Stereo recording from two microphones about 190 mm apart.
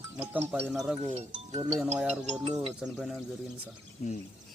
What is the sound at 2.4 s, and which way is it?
Speech, 30° right (ahead or behind).